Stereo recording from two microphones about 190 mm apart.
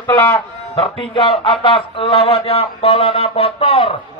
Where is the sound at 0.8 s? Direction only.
25° left (ahead or behind).